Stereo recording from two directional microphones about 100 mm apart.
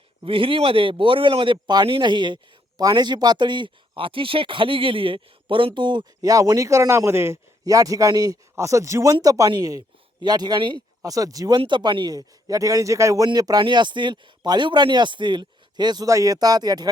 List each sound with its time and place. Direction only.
0.2 s a man's voice: 60° right (ahead or behind)
11.0 s a man's voice: 35° right (ahead or behind)
11.6 s a man's voice: 50° right (ahead or behind)
16.0 s a man's voice: 35° right (ahead or behind)